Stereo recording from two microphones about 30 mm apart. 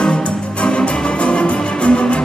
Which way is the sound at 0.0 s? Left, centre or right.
Left.